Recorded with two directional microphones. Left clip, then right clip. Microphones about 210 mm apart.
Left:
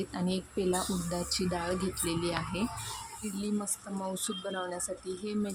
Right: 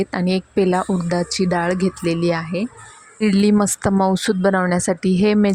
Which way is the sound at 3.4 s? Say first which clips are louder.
Right 18 dB; 40° right (ahead or behind).